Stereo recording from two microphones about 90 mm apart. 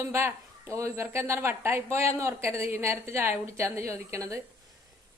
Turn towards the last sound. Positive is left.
turn(degrees=-35)  # may be behind; listen again after turning